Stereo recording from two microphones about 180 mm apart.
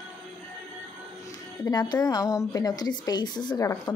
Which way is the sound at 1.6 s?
25° left (ahead or behind).